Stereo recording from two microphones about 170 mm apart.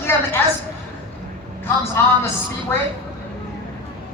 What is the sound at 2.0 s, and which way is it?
Speech, 15° left (ahead or behind).